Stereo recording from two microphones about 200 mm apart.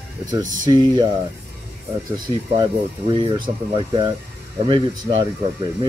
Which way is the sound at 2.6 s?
25° right (ahead or behind).